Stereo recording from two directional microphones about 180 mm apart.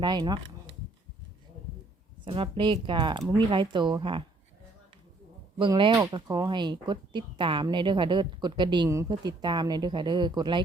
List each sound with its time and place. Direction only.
0.0 s speech: 25° right (ahead or behind)
2.2 s speech: 30° right (ahead or behind)
5.5 s speech: 25° right (ahead or behind)